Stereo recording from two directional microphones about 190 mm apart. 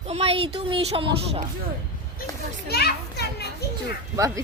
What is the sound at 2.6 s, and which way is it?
Children playing, 55° left (ahead or behind).